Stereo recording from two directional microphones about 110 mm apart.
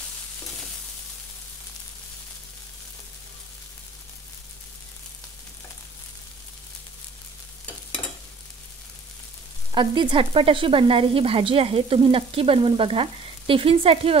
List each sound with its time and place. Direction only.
9.8 s sizzle: 45° right (ahead or behind)